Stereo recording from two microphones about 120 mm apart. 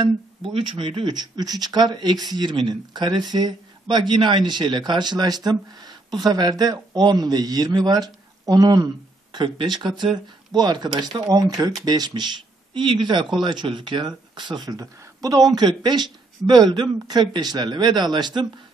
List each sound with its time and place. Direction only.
0.0 s speech: 50° right (ahead or behind)